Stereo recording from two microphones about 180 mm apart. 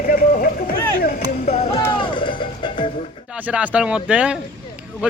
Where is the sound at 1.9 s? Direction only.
30° left (ahead or behind).